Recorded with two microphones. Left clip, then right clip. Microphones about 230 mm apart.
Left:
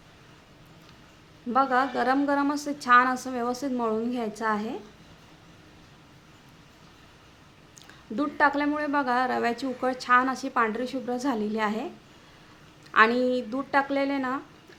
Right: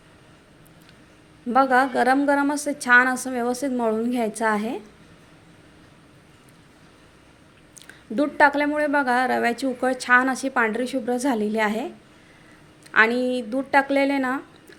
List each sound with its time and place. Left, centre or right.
1.5 s a woman's voice: centre
7.8 s a woman's voice: centre
12.9 s a woman's voice: centre